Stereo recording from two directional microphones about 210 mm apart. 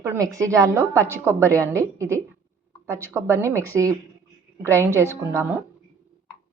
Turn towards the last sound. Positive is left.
turn(degrees=-10)  # may be behind; listen again after turning